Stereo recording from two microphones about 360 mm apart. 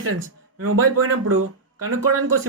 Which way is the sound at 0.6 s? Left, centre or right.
Right.